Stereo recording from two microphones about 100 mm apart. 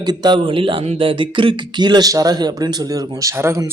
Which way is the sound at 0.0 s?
45° right (ahead or behind).